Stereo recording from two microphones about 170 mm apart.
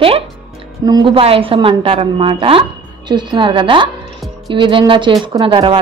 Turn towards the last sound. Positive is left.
turn(degrees=-30)  # may be behind; listen again after turning